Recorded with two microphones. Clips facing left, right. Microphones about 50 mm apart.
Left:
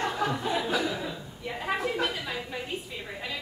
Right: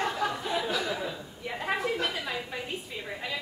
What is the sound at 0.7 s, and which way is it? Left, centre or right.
Chuckle, centre.